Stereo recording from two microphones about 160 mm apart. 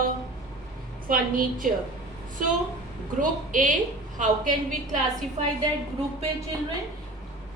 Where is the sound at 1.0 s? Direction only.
60° right (ahead or behind).